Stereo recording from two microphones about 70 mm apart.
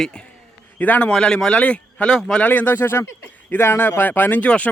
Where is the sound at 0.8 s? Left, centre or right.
Left.